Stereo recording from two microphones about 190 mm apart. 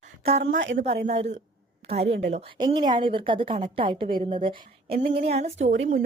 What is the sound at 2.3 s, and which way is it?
A woman's voice, 30° right (ahead or behind).